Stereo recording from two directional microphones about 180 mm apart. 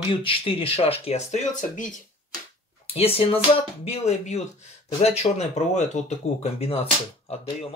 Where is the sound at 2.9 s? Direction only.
35° left (ahead or behind).